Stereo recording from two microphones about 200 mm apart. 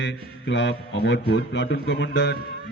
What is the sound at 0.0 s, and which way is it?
A man's voice, 65° left (ahead or behind).